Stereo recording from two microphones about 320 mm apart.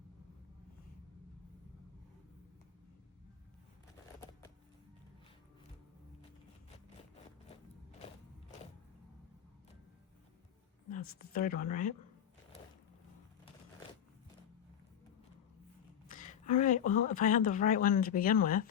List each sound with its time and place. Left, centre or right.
11.2 s speech: left
16.0 s a sound: left
17.2 s speech: left